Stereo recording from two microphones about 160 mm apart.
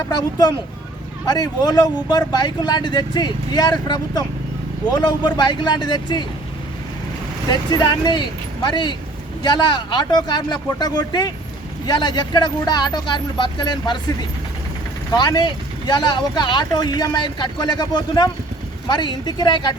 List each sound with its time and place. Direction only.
0.1 s speech: 25° left (ahead or behind)
7.5 s speech: 25° left (ahead or behind)
15.1 s speech: 25° left (ahead or behind)